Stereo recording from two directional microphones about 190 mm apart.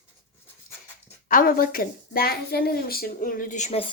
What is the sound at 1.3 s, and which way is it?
A woman's voice, 45° left (ahead or behind).